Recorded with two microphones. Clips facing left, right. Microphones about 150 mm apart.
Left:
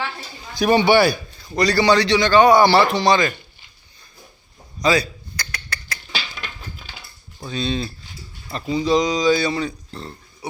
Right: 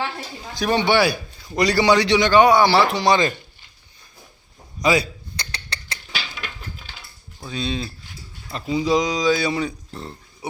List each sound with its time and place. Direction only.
0.6 s speech: 5° left (ahead or behind)
1.5 s a man's voice: 15° right (ahead or behind)
2.5 s speech: centre (ahead or behind)
4.8 s speech: 15° right (ahead or behind)
5.4 s a sound: 30° right (ahead or behind)
7.4 s a man's voice: 10° right (ahead or behind)
9.5 s a man's voice: 15° right (ahead or behind)